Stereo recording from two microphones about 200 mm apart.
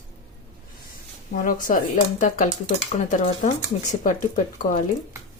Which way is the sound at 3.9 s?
40° left (ahead or behind).